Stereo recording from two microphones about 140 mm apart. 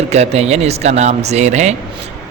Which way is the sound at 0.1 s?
50° right (ahead or behind).